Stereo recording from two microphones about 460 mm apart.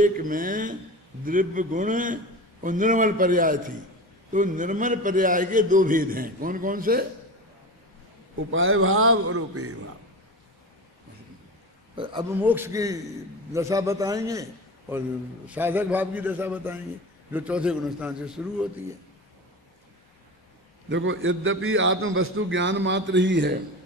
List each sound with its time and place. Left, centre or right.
0.0 s a man's voice: centre
8.5 s a man's voice: right
11.9 s a man's voice: centre
20.9 s a man's voice: right